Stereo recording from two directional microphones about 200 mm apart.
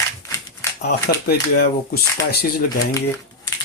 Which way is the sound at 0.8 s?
50° left (ahead or behind).